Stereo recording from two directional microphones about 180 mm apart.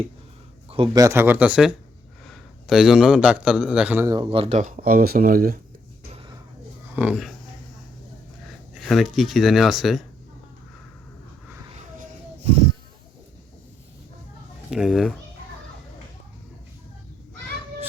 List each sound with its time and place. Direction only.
0.7 s a man's voice: 30° right (ahead or behind)
1.0 s a man's voice: 15° right (ahead or behind)
4.1 s speech: 30° right (ahead or behind); by 5.5 s 50° right (ahead or behind)
6.9 s speech: 5° right (ahead or behind)
8.8 s speech: centre (ahead or behind)
11.7 s a sound: 40° right (ahead or behind)
14.7 s speech: centre (ahead or behind)